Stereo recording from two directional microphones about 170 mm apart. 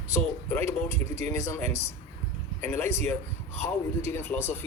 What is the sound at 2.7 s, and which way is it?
Speech, 15° left (ahead or behind).